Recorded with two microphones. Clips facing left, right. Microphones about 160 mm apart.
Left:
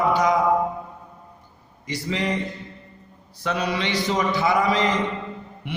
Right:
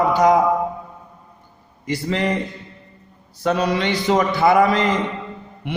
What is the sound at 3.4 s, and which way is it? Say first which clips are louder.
A man's voice: right 6 dB; 45° right (ahead or behind).